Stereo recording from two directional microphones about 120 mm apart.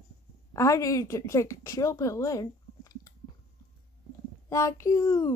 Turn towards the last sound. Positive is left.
turn(degrees=25)  # may be behind; listen again after turning